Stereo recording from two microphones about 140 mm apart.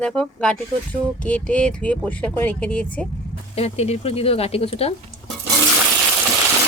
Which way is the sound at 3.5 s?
45° left (ahead or behind).